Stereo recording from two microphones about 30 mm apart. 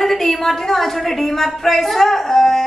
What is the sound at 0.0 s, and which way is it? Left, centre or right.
A woman's voice, centre.